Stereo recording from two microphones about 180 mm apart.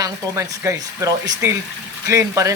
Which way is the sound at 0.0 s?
15° right (ahead or behind).